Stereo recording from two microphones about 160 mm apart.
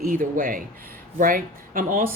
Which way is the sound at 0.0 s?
60° right (ahead or behind).